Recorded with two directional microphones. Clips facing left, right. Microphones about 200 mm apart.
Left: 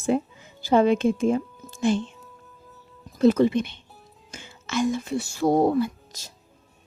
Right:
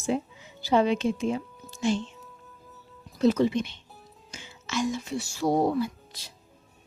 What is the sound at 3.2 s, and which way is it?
Speech, 55° left (ahead or behind).